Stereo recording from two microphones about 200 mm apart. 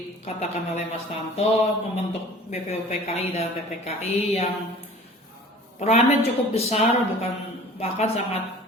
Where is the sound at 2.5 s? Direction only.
35° left (ahead or behind).